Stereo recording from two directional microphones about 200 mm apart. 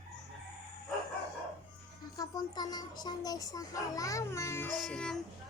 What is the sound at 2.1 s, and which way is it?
Speech, 20° left (ahead or behind).